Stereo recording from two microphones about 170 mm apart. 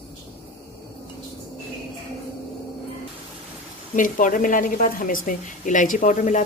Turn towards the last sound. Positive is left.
turn(degrees=45)  # may be behind; listen again after turning